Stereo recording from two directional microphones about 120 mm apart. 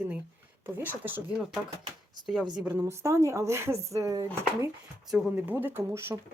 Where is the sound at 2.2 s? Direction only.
5° right (ahead or behind).